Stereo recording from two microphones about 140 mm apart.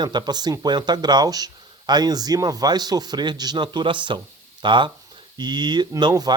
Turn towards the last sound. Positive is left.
turn(degrees=-30)  # may be behind; listen again after turning